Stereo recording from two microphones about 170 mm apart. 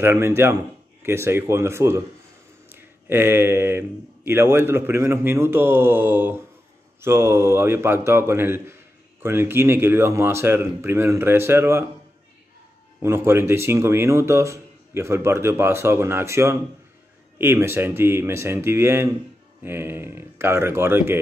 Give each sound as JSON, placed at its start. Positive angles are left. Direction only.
{"t": 0.0, "sound": "a man's voice", "side_deg": -15}
{"t": 13.0, "sound": "a man's voice", "side_deg": -15}